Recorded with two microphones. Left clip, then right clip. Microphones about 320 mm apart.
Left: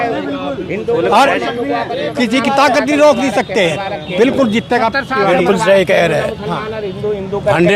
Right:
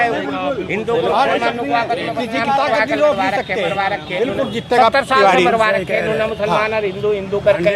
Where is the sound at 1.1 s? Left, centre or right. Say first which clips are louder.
Left 4 dB; left.